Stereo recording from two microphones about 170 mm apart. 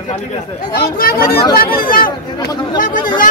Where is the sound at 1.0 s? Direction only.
60° left (ahead or behind).